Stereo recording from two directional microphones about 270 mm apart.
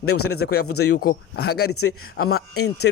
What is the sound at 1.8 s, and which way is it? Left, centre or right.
Speech, left.